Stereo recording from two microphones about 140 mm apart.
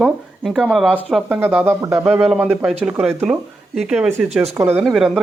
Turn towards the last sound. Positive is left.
turn(degrees=0)  # may be behind; listen again after turning